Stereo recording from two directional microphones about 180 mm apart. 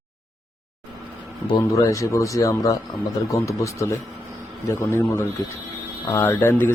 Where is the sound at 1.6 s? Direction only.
15° left (ahead or behind).